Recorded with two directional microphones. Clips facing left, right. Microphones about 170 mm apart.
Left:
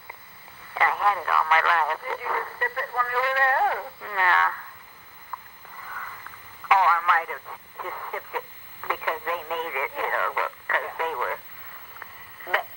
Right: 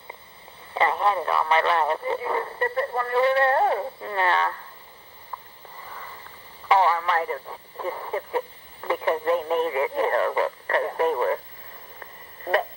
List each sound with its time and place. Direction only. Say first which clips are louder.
0.7 s speech: right 2 dB; 25° right (ahead or behind)
5.8 s speech: even; 30° right (ahead or behind)